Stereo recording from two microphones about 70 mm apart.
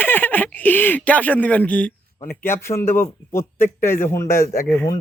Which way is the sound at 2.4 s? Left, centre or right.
Left.